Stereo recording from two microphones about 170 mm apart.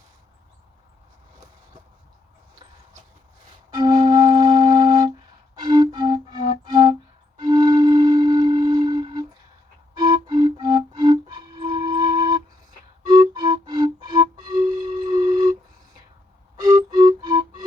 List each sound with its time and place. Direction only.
3.8 s music: 25° right (ahead or behind)
15.1 s a sound: 25° right (ahead or behind)
16.6 s music: 20° right (ahead or behind)